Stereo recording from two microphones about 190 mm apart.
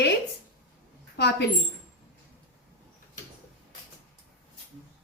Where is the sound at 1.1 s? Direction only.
60° left (ahead or behind).